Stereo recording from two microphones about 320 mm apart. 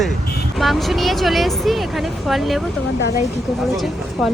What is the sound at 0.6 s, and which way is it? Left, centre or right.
Speech, centre.